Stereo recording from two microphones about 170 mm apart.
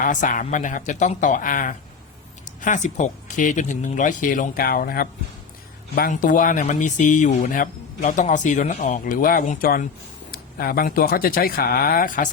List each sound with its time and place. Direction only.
0.0 s speech: 50° left (ahead or behind)